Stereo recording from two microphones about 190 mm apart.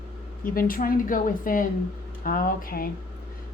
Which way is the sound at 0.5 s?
50° left (ahead or behind).